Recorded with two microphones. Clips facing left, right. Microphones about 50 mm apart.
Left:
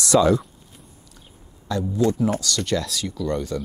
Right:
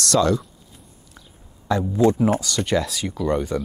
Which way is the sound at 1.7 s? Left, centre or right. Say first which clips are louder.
Right 3 dB; right.